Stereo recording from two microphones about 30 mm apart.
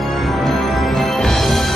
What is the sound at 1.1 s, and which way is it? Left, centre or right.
Music, centre.